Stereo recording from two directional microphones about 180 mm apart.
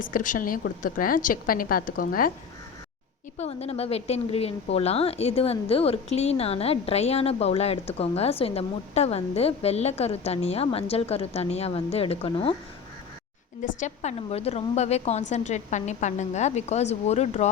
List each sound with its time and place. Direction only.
0.0 s a woman's voice: 50° left (ahead or behind)
3.3 s a woman's voice: 35° left (ahead or behind)
13.7 s a woman's voice: 40° left (ahead or behind)